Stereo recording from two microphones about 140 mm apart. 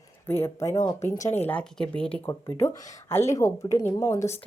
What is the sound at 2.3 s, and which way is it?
Speech, 20° left (ahead or behind).